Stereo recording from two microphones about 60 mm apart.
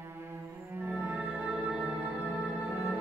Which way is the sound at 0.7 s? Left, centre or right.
Right.